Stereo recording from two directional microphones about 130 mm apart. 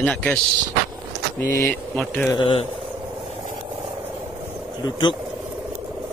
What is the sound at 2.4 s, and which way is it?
Speech, 40° left (ahead or behind).